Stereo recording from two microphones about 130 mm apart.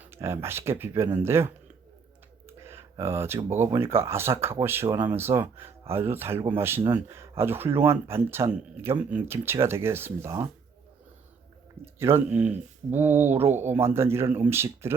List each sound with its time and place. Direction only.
0.0 s speech: 20° right (ahead or behind)
3.0 s speech: 20° right (ahead or behind)
11.9 s speech: 20° right (ahead or behind)